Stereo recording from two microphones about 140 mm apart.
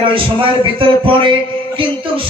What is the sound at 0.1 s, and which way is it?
A man's voice, 40° right (ahead or behind).